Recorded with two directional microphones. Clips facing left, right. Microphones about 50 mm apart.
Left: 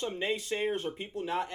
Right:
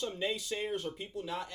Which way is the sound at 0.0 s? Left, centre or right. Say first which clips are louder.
Left 3 dB; left.